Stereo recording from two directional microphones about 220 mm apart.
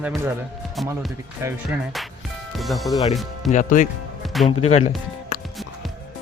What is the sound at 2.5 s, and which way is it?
Speech, centre (ahead or behind).